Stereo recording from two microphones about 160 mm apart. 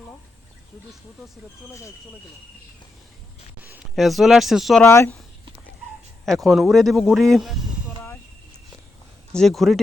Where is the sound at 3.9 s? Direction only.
Centre (ahead or behind).